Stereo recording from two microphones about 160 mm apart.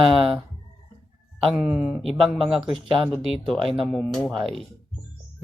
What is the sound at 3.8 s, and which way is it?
Speech, centre (ahead or behind).